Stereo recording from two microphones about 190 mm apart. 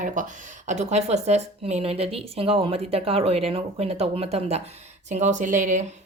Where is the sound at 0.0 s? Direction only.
40° right (ahead or behind).